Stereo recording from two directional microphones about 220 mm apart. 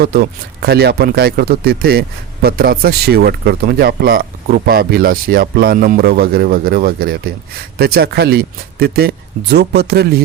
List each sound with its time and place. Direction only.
0.0 s speech: 45° right (ahead or behind)